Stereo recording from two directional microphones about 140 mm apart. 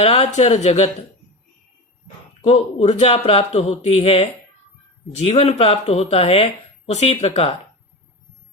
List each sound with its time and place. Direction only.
0.0 s speech: 45° left (ahead or behind)
2.4 s speech: 50° left (ahead or behind)